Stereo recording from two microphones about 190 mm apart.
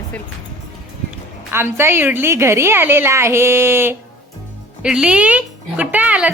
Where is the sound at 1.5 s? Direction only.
15° right (ahead or behind).